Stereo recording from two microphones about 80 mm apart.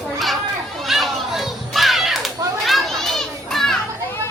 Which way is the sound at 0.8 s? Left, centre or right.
Centre.